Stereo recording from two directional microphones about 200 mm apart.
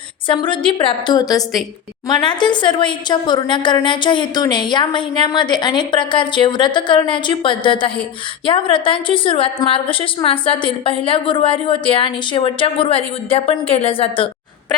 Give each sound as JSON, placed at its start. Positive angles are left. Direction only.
{"t": 0.3, "sound": "a woman's voice", "side_deg": 25}